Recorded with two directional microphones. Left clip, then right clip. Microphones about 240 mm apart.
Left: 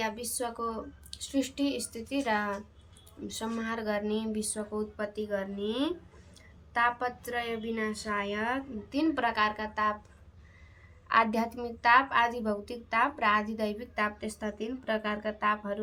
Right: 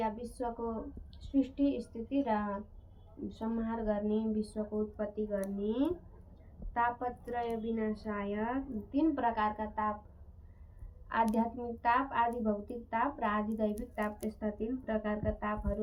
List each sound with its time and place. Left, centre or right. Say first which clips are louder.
0.0 s a woman's voice: left 2 dB; centre
11.1 s a woman's voice: left 5 dB; centre